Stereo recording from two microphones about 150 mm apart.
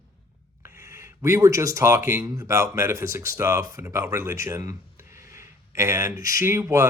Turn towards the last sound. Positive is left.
turn(degrees=-20)  # may be behind; listen again after turning